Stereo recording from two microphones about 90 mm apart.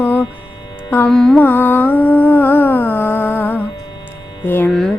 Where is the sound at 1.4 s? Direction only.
20° left (ahead or behind).